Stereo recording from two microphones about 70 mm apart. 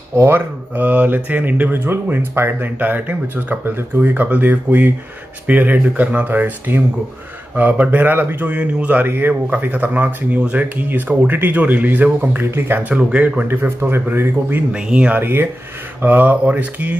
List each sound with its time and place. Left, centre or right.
0.2 s speech: right
12.9 s speech: centre
13.5 s speech: right
14.7 s speech: centre
15.1 s speech: right